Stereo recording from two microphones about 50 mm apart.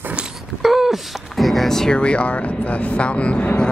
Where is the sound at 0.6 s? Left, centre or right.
Centre.